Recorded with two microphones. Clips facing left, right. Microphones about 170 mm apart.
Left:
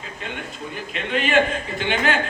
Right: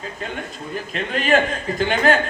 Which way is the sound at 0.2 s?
40° right (ahead or behind).